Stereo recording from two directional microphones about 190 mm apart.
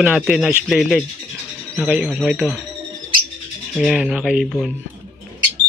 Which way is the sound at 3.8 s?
Centre (ahead or behind).